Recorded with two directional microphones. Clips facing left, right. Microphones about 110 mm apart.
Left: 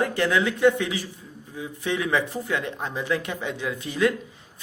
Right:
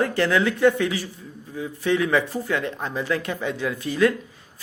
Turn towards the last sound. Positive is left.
turn(degrees=20)  # may be behind; listen again after turning